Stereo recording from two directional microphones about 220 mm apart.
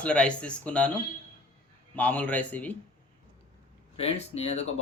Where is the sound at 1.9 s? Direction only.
5° left (ahead or behind).